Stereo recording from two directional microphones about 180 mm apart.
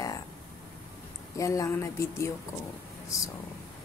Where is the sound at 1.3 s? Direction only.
20° left (ahead or behind).